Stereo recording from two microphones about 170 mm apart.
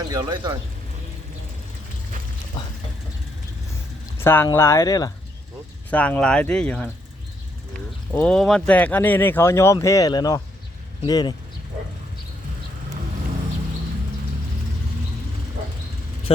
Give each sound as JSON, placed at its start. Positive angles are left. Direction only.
{"t": 0.1, "sound": "speech", "side_deg": -25}
{"t": 4.2, "sound": "speech", "side_deg": 15}
{"t": 5.9, "sound": "speech", "side_deg": 10}
{"t": 8.1, "sound": "speech", "side_deg": 5}